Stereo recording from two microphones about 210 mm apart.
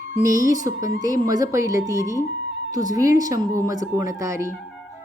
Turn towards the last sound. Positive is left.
turn(degrees=-15)  # may be behind; listen again after turning